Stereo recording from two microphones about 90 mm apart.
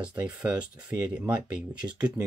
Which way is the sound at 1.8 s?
30° right (ahead or behind).